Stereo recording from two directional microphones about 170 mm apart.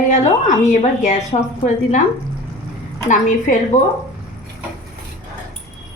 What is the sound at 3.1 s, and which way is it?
Speech, 45° left (ahead or behind).